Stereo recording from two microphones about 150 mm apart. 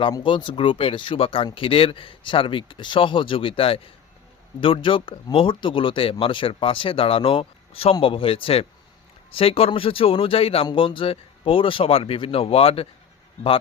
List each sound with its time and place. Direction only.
0.0 s speech: 35° left (ahead or behind)